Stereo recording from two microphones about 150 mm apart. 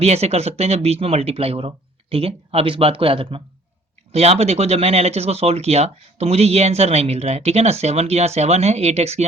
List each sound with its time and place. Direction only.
0.0 s speech: 45° right (ahead or behind)